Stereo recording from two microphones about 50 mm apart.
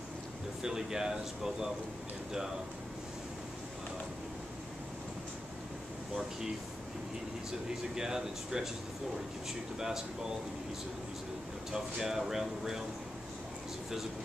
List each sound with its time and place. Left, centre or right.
0.6 s speech: centre
7.9 s speech: centre
9.8 s speech: centre
11.7 s speech: centre